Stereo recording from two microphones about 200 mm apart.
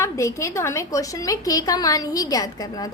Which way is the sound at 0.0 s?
15° left (ahead or behind).